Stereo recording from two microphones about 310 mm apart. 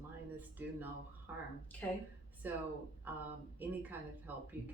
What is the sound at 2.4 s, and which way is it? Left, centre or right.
Speech, centre.